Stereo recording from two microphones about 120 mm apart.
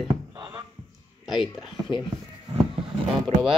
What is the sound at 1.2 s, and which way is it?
Speech, 5° right (ahead or behind).